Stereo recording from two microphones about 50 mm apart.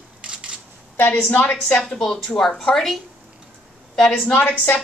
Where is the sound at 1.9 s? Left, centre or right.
Centre.